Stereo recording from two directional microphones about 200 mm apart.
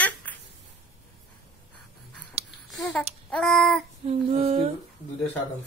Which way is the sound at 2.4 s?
30° right (ahead or behind).